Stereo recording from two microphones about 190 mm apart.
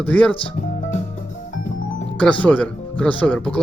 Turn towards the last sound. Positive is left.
turn(degrees=5)  # may be behind; listen again after turning